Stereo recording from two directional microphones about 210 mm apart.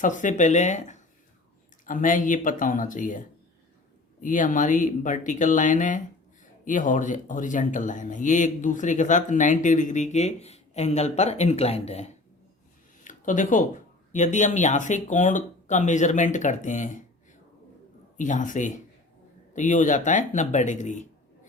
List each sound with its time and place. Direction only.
0.0 s speech: 40° left (ahead or behind)
13.1 s a sound: 35° left (ahead or behind)
14.1 s speech: 35° left (ahead or behind)
18.2 s speech: 35° left (ahead or behind)